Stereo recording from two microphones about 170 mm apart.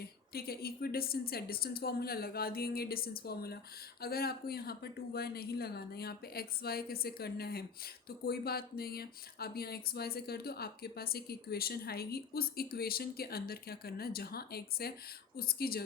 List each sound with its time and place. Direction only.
0.0 s speech: 65° left (ahead or behind)